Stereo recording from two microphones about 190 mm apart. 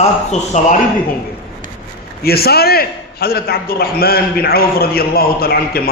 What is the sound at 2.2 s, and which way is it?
A man's voice, 55° left (ahead or behind).